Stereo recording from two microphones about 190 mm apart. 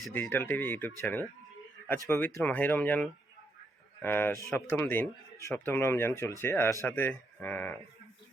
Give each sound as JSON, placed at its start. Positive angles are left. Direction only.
{"t": 0.0, "sound": "speech", "side_deg": 10}